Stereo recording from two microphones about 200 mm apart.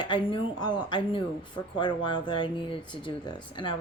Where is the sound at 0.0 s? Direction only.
25° left (ahead or behind).